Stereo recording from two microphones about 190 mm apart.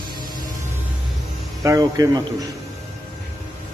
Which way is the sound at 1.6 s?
15° right (ahead or behind).